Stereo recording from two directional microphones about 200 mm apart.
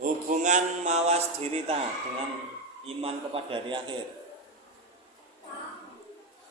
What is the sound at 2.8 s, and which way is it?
A man's voice, 30° right (ahead or behind).